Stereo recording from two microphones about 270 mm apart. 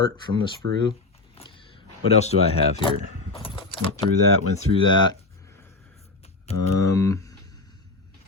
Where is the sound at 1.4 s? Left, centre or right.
Left.